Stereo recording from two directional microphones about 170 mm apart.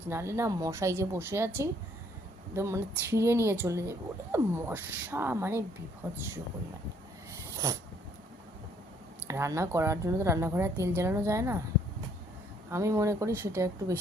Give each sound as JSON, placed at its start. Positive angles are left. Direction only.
{"t": 0.1, "sound": "a woman's voice", "side_deg": -15}
{"t": 7.5, "sound": "snort", "side_deg": -20}
{"t": 9.2, "sound": "a woman's voice", "side_deg": -15}
{"t": 12.7, "sound": "a woman's voice", "side_deg": -20}